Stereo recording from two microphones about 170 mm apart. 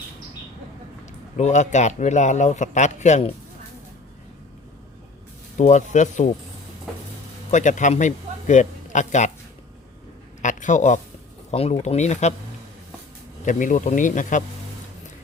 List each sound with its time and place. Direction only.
1.4 s speech: 45° left (ahead or behind)
5.5 s speech: 45° left (ahead or behind)
7.5 s speech: 45° left (ahead or behind)
10.4 s speech: 45° left (ahead or behind)
13.4 s speech: 50° left (ahead or behind)